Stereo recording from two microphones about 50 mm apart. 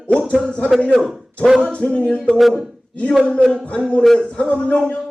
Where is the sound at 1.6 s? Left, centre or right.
Left.